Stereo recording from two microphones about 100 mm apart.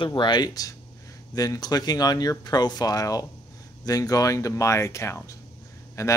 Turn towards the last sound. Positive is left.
turn(degrees=30)  # may be behind; listen again after turning